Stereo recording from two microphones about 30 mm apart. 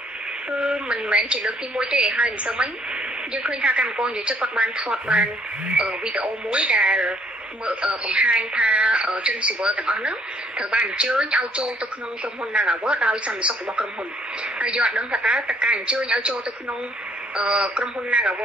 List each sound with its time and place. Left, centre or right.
0.5 s a woman's voice: right
2.0 s a woman's voice: right
17.5 s a woman's voice: right